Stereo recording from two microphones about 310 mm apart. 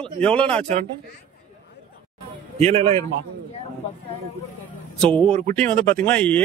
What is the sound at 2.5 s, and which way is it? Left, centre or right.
Speech, centre.